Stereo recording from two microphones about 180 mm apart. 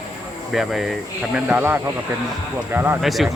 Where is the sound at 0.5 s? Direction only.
Centre (ahead or behind).